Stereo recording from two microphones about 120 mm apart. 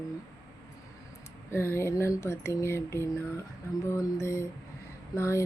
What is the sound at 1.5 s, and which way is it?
Speech, 20° left (ahead or behind).